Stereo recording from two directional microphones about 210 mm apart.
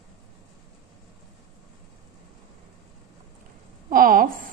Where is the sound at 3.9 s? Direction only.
40° right (ahead or behind).